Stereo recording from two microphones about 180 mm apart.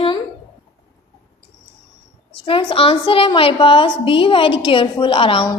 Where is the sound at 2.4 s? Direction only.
30° left (ahead or behind).